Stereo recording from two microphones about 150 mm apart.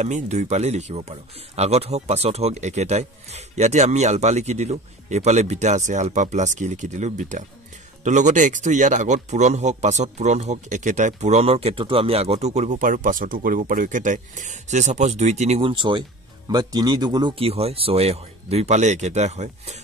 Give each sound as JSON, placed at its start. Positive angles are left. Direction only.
{"t": 0.0, "sound": "speech", "side_deg": -50}
{"t": 15.7, "sound": "speech", "side_deg": -30}
{"t": 17.4, "sound": "speech", "side_deg": -40}